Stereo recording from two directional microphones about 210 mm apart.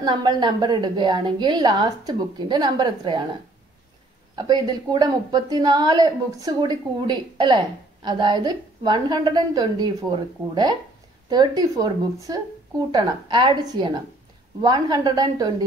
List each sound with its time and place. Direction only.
0.0 s a woman's voice: 20° right (ahead or behind)
4.4 s a woman's voice: 20° right (ahead or behind)